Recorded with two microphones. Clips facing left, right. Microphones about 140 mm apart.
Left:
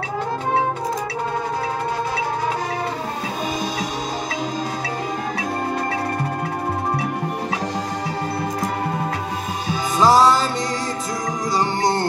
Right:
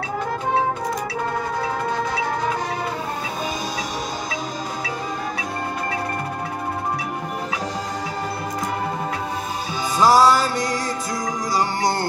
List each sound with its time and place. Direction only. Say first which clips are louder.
9.9 s music: left 1 dB; centre (ahead or behind)
10.2 s music: even; 25° left (ahead or behind)